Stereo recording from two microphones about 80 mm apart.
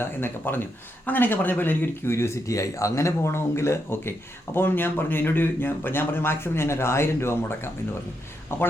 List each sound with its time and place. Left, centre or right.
0.0 s speech: left